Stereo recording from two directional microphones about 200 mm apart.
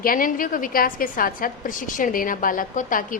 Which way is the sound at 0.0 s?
45° left (ahead or behind).